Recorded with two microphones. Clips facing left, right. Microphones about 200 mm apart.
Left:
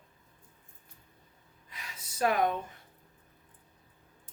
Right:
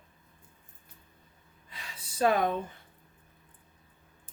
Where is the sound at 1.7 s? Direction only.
30° right (ahead or behind).